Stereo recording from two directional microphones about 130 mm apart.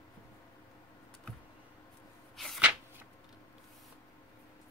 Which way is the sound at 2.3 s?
Centre (ahead or behind).